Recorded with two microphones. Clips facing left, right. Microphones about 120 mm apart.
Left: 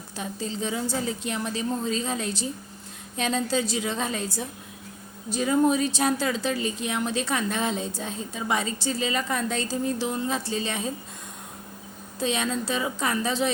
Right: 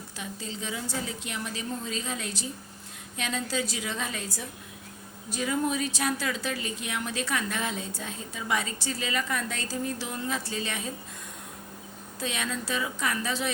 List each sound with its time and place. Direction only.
0.2 s a woman's voice: 35° left (ahead or behind)
12.2 s a woman's voice: 25° left (ahead or behind)